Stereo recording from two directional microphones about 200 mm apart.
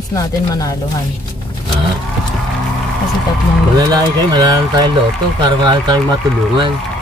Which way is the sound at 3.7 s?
20° right (ahead or behind).